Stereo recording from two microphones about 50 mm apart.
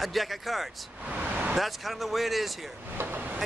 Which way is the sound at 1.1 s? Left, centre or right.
Right.